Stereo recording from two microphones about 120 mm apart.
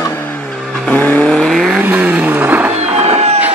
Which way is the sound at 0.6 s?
5° left (ahead or behind).